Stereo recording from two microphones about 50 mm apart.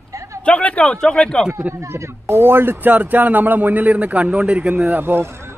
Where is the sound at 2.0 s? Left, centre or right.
Right.